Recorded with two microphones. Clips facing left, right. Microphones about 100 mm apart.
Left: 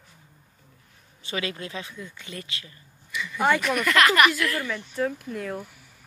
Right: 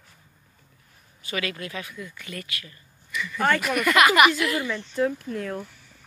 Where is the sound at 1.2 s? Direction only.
25° left (ahead or behind).